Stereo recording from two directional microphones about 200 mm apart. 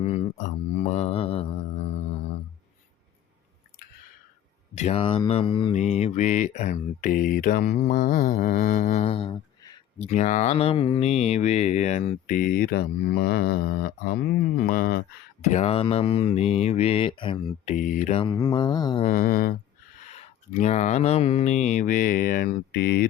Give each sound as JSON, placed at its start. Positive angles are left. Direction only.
{"t": 0.0, "sound": "mantra", "side_deg": 35}
{"t": 4.7, "sound": "speech", "side_deg": 35}
{"t": 5.7, "sound": "mantra", "side_deg": 35}
{"t": 10.1, "sound": "mantra", "side_deg": 35}
{"t": 15.4, "sound": "mantra", "side_deg": 35}
{"t": 17.7, "sound": "mantra", "side_deg": 40}
{"t": 18.2, "sound": "speech", "side_deg": 20}
{"t": 19.0, "sound": "mantra", "side_deg": 45}